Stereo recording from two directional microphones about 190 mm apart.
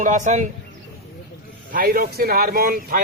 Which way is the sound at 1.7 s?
50° right (ahead or behind).